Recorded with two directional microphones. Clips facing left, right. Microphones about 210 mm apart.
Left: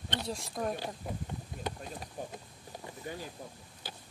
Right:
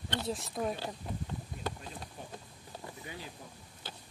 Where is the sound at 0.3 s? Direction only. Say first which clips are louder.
Right 1 dB; centre (ahead or behind).